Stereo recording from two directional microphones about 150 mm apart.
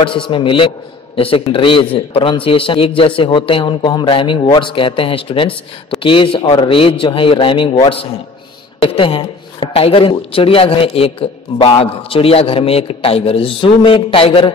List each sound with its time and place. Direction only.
0.0 s speech: 35° left (ahead or behind)